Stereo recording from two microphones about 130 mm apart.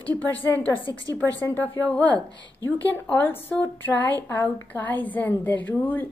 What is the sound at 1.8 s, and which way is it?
A woman's voice, 10° left (ahead or behind).